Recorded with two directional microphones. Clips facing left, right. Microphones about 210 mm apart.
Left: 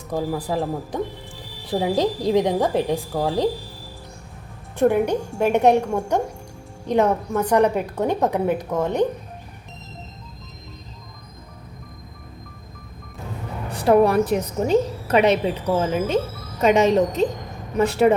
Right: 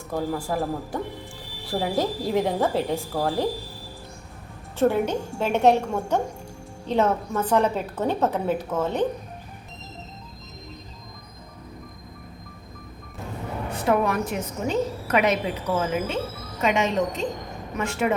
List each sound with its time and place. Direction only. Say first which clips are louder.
0.3 s a woman's voice: left 2 dB; 20° left (ahead or behind)
4.8 s a woman's voice: left 3 dB; 15° left (ahead or behind)
13.7 s a woman's voice: left 7 dB; 35° left (ahead or behind)